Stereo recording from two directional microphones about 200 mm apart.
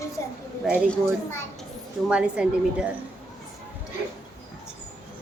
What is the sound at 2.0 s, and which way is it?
Speech, 5° right (ahead or behind).